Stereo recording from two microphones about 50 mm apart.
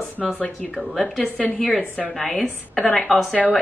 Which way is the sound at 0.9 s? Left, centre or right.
Centre.